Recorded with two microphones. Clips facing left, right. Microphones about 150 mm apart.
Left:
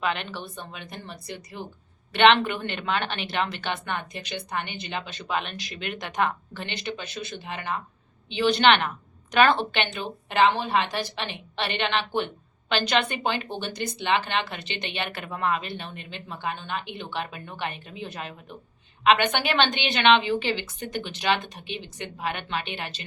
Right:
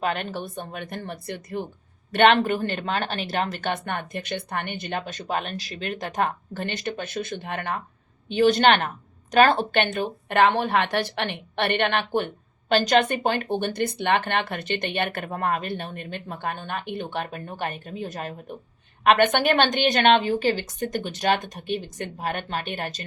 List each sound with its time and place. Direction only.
0.0 s speech: 45° right (ahead or behind)
2.1 s speech: 45° right (ahead or behind)
8.3 s speech: 45° right (ahead or behind)